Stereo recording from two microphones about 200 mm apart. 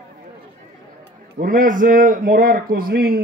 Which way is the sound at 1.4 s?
45° right (ahead or behind).